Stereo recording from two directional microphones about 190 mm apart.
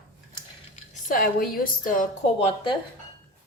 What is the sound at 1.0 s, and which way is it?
A woman's voice, 50° left (ahead or behind).